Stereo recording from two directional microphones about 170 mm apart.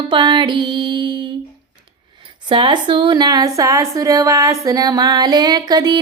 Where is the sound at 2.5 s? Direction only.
25° right (ahead or behind).